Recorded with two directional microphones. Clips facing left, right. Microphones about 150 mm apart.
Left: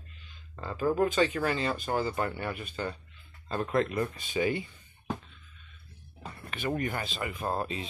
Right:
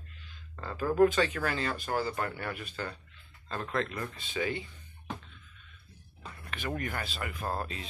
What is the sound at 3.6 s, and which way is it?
Speech, 20° left (ahead or behind).